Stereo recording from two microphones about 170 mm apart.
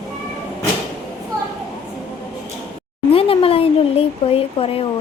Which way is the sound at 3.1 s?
35° left (ahead or behind).